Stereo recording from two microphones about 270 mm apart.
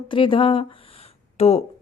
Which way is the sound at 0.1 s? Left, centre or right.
Centre.